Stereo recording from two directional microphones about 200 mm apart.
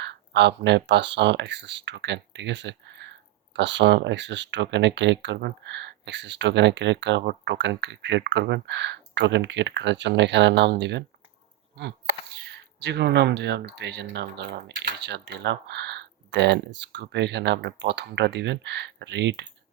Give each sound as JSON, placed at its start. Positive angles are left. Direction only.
{"t": 0.0, "sound": "speech", "side_deg": -60}